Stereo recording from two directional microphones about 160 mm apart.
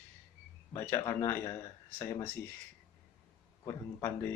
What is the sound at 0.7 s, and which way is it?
Speech, 15° left (ahead or behind).